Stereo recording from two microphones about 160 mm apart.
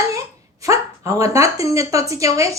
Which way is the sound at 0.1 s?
20° right (ahead or behind).